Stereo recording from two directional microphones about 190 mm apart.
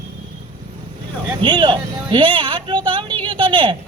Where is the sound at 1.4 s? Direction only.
25° right (ahead or behind).